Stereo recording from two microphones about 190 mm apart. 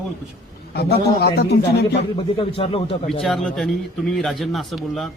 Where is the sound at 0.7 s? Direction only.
55° left (ahead or behind).